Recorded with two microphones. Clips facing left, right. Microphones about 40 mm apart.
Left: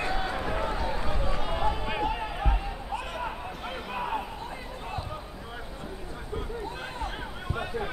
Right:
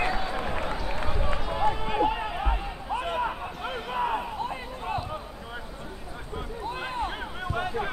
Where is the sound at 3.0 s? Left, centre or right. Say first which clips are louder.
Right 9 dB; right.